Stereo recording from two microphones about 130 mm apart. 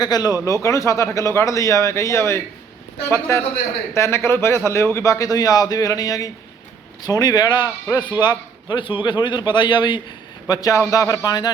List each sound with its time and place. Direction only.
0.0 s a man's voice: 30° left (ahead or behind)